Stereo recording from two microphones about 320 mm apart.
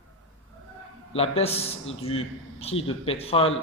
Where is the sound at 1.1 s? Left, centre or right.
Centre.